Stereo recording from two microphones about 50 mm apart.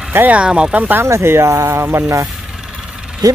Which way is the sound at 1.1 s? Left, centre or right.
Right.